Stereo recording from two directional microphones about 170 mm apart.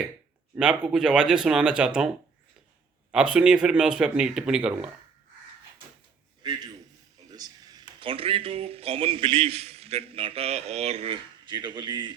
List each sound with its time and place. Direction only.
0.5 s speech: 5° right (ahead or behind)
3.1 s speech: 5° right (ahead or behind)
6.4 s a man's voice: 25° right (ahead or behind)